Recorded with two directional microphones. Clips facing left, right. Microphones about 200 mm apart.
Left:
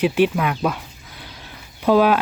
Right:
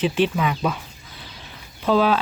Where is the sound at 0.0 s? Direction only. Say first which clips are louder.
Left 3 dB; 10° left (ahead or behind).